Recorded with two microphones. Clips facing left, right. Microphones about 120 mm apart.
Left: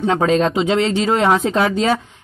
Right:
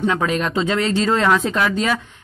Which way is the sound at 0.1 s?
30° left (ahead or behind).